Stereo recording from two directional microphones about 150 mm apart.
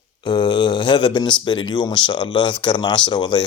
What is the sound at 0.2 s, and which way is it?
Speech, 30° left (ahead or behind).